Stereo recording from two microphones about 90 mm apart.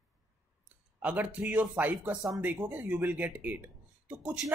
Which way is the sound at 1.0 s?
15° right (ahead or behind).